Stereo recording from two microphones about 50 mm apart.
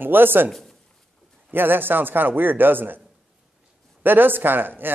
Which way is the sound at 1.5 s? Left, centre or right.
Right.